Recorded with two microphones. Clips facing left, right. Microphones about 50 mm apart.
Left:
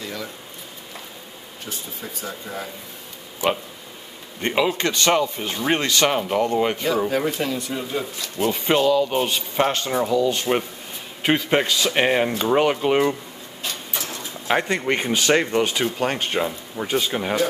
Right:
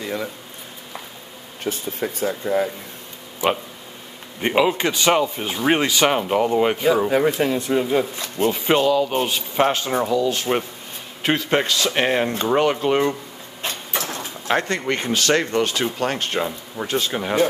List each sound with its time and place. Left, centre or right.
0.0 s a sound: right
1.6 s speech: right
4.4 s speech: centre; by 8.5 s right
8.5 s speech: centre
13.6 s a sound: right
14.5 s speech: centre